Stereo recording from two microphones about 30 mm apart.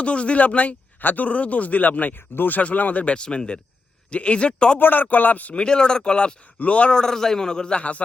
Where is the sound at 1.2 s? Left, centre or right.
Left.